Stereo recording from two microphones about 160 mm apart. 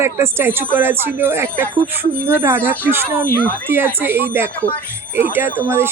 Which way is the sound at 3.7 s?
15° right (ahead or behind).